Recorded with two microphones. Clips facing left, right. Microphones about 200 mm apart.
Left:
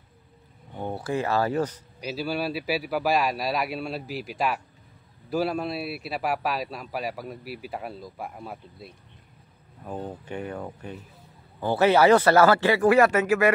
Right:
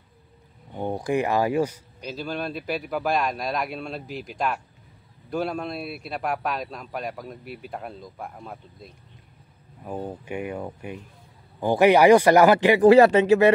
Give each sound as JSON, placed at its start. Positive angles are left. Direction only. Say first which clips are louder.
{"t": 0.7, "sound": "speech", "louder": "right 4 dB", "side_deg": -15}
{"t": 2.0, "sound": "a man's voice", "louder": "left 2 dB", "side_deg": 5}
{"t": 9.8, "sound": "speech", "louder": "right 2 dB", "side_deg": -10}